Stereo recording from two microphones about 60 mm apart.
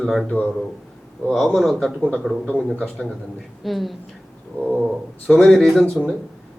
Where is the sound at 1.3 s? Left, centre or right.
Centre.